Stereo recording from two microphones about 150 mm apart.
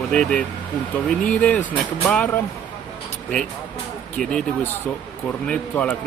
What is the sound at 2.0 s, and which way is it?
Speech, centre (ahead or behind).